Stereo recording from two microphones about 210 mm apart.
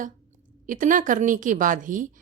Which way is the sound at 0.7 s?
40° right (ahead or behind).